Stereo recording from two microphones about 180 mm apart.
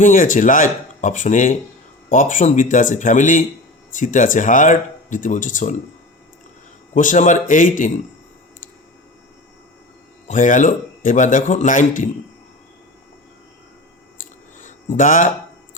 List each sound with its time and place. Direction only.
0.0 s speech: 45° left (ahead or behind)
6.9 s speech: 45° left (ahead or behind)
10.2 s speech: 45° left (ahead or behind)
14.6 s a sound: 45° left (ahead or behind)